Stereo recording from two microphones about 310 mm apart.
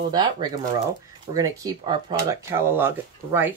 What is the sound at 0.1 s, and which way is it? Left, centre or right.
Speech, centre.